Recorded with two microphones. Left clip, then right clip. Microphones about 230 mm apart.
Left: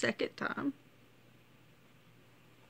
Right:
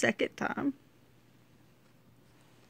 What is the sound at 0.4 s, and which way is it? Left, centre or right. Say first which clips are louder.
Speech: right 3 dB; right.